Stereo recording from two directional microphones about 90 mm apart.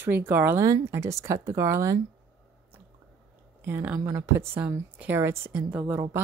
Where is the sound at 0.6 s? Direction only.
35° right (ahead or behind).